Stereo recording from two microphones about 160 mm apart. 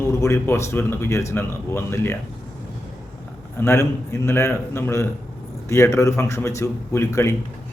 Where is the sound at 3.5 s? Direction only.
15° left (ahead or behind).